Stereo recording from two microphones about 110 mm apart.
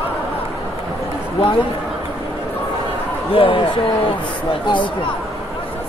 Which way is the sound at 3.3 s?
55° left (ahead or behind).